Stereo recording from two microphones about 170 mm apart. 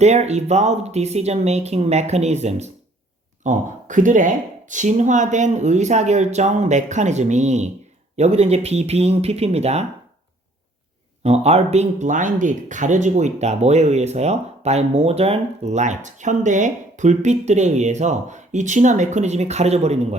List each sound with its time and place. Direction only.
0.0 s speech: 40° right (ahead or behind)
11.2 s speech: 40° right (ahead or behind)